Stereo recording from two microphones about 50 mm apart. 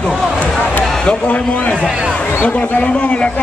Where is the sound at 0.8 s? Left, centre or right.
Centre.